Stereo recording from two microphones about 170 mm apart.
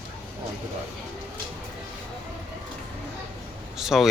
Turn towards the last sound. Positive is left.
turn(degrees=0)  # may be behind; listen again after turning